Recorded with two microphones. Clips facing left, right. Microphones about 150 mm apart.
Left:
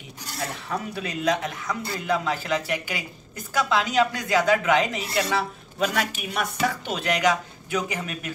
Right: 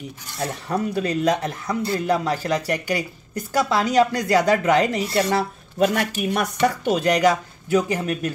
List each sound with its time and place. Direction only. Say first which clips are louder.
0.4 s speech: right 6 dB; 35° right (ahead or behind)